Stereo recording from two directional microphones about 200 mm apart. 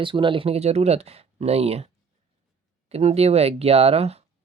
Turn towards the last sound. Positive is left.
turn(degrees=-30)  # may be behind; listen again after turning